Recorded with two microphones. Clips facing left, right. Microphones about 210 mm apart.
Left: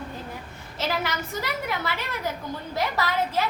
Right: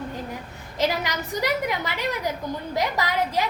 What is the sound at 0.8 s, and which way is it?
A woman's voice, 15° right (ahead or behind).